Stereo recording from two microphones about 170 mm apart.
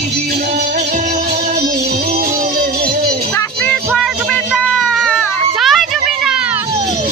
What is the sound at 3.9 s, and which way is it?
Music, 5° left (ahead or behind).